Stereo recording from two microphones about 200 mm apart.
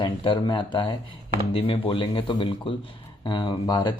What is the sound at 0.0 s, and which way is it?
A man's voice, 25° left (ahead or behind).